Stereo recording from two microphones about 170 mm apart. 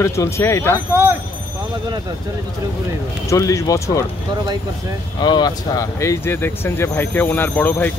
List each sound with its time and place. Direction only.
0.0 s speech: 15° left (ahead or behind)
3.3 s speech: 20° left (ahead or behind)
5.2 s speech: 25° left (ahead or behind)